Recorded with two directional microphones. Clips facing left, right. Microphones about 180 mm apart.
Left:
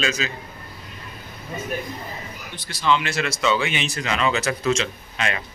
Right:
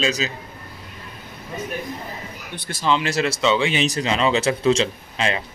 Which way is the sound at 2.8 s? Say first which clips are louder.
Right 1 dB; 35° right (ahead or behind).